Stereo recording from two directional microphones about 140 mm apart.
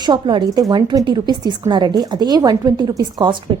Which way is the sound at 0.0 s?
35° right (ahead or behind).